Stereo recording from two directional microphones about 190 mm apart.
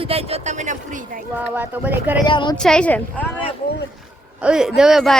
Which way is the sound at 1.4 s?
10° right (ahead or behind).